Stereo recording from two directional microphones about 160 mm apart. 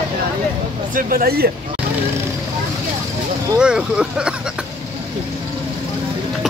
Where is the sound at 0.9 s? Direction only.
65° right (ahead or behind).